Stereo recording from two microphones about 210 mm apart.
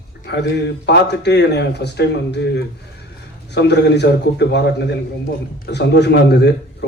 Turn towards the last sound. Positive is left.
turn(degrees=55)  # may be behind; listen again after turning